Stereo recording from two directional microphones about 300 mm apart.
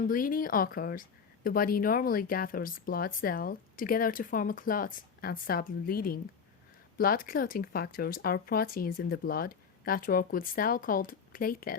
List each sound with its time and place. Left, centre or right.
0.0 s speech: left